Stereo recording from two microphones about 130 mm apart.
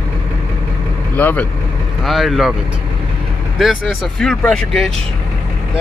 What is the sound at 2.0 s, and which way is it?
Speech, centre (ahead or behind).